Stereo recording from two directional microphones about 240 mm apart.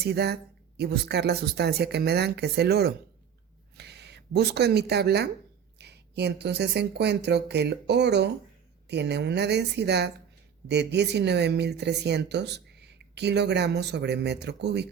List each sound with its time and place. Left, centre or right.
0.0 s speech: right